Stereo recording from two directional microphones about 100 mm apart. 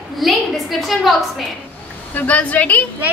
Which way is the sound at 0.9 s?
Centre (ahead or behind).